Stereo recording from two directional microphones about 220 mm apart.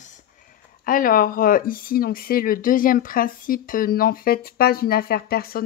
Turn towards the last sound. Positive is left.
turn(degrees=45)  # may be behind; listen again after turning